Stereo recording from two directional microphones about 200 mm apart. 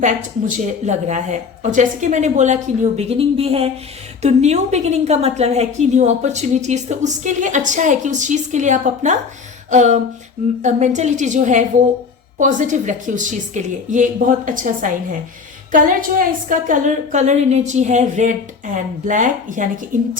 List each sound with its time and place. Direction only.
0.0 s a woman's voice: 40° right (ahead or behind)